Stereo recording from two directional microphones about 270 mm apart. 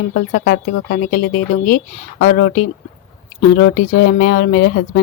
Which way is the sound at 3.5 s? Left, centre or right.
Left.